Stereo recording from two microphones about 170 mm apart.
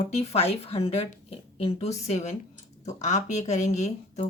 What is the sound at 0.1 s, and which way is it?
Speech, 40° left (ahead or behind).